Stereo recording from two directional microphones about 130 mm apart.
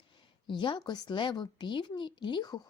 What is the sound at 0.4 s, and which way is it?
A woman's voice, 35° left (ahead or behind).